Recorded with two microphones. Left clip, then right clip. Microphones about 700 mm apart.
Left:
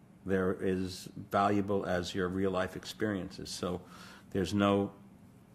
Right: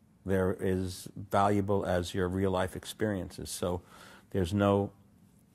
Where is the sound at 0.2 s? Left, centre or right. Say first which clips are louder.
Right 2 dB; right.